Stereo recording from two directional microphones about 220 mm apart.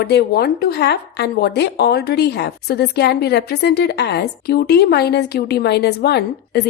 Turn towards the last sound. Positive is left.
turn(degrees=50)  # may be behind; listen again after turning